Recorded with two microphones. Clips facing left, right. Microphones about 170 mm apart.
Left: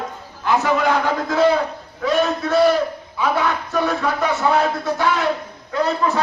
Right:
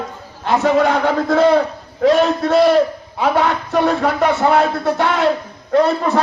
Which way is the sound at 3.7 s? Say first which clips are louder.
Right 6 dB; 60° right (ahead or behind).